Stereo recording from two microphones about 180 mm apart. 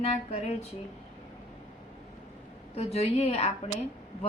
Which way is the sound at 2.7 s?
35° left (ahead or behind).